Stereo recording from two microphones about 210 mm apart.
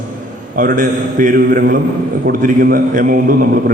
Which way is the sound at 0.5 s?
40° right (ahead or behind).